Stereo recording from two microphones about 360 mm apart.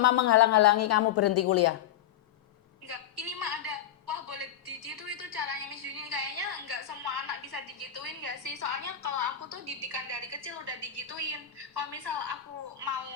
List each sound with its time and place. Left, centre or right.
0.0 s a woman's voice: left
2.8 s a sound: right
9.6 s a woman's voice: right